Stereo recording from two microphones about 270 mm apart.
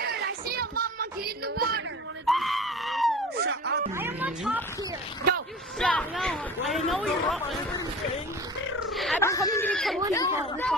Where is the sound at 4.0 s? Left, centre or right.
Centre.